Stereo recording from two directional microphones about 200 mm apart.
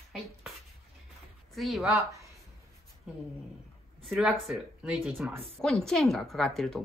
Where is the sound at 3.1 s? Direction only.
5° right (ahead or behind).